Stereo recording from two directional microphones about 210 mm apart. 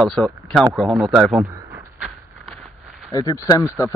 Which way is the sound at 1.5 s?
10° right (ahead or behind).